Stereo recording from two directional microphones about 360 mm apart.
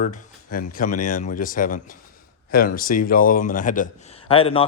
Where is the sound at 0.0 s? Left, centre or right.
Left.